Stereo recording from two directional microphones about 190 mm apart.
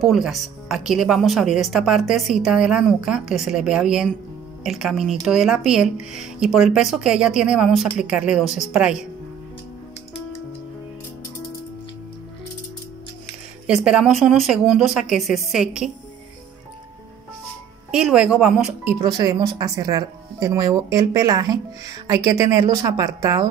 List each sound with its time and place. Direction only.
0.0 s speech: centre (ahead or behind)
13.7 s speech: 5° right (ahead or behind)
17.9 s speech: 5° right (ahead or behind)
19.0 s speech: 20° right (ahead or behind)